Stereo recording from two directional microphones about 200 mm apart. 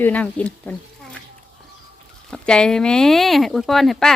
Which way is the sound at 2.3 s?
5° left (ahead or behind).